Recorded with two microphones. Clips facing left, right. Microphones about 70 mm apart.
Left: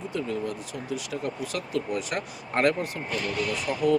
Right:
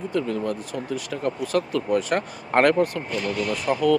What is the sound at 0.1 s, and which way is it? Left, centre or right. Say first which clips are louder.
Speech: right 5 dB; right.